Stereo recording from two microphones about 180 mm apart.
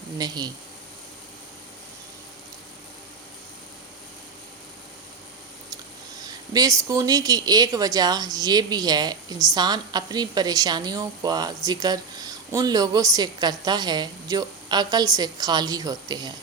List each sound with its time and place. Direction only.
0.2 s speech: 20° right (ahead or behind)
6.2 s speech: 20° right (ahead or behind)